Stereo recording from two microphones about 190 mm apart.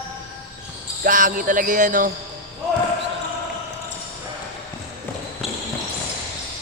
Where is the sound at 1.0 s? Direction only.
45° right (ahead or behind).